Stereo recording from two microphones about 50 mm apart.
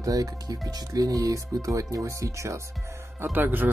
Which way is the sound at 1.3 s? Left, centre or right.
Right.